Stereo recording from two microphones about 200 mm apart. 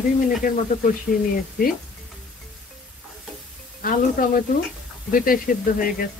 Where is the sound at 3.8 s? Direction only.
45° left (ahead or behind).